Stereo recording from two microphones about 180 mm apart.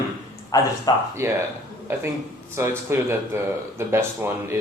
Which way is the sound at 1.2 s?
15° right (ahead or behind).